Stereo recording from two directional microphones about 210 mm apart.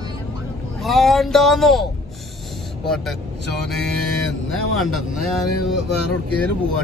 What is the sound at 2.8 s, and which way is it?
Speech, centre (ahead or behind).